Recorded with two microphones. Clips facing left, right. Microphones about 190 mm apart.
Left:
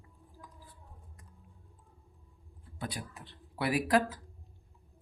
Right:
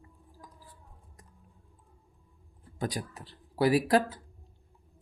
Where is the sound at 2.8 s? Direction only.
40° right (ahead or behind).